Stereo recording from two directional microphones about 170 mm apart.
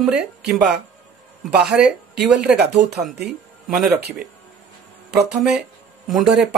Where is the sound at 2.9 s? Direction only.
75° right (ahead or behind).